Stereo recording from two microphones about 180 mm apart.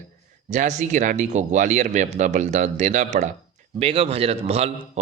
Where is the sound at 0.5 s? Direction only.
40° right (ahead or behind).